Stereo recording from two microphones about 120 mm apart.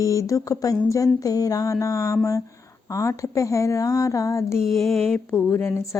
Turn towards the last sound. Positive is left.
turn(degrees=20)  # may be behind; listen again after turning